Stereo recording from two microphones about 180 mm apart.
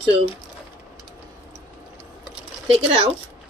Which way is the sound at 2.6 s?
30° right (ahead or behind).